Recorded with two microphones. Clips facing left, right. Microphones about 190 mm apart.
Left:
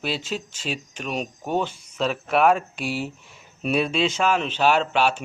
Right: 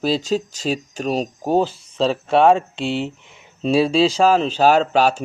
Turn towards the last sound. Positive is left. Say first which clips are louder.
# right 5 dB
turn(degrees=-40)  # may be behind; listen again after turning